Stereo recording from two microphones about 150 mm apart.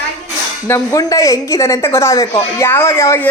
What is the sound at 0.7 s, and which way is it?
Speech, 20° left (ahead or behind).